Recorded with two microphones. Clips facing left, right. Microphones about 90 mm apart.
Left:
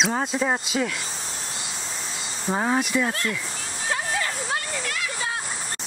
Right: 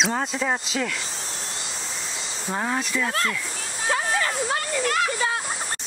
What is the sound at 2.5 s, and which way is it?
Speech, 10° left (ahead or behind).